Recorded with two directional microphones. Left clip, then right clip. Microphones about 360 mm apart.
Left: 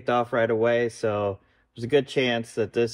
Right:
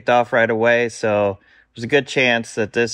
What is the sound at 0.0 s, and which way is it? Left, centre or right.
Speech, right.